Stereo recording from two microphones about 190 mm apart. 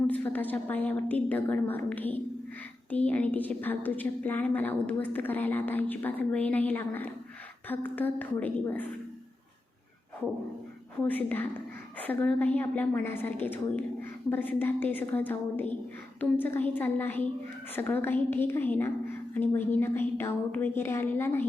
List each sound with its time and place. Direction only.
0.1 s a woman's voice: 10° left (ahead or behind)
11.0 s a woman's voice: 10° left (ahead or behind)